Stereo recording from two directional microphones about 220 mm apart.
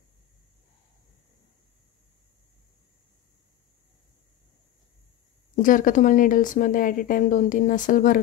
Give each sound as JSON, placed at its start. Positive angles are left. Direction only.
{"t": 5.6, "sound": "a woman's voice", "side_deg": 35}